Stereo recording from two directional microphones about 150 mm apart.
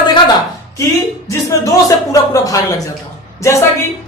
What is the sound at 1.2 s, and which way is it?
Speech, 20° left (ahead or behind).